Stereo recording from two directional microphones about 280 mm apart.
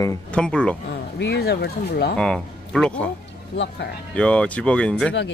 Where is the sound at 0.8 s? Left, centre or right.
Left.